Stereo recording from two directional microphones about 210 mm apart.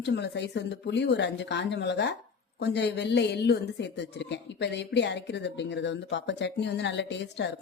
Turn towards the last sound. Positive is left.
turn(degrees=55)  # may be behind; listen again after turning